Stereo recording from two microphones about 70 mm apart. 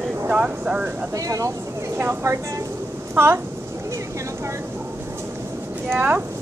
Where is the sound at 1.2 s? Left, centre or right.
Right.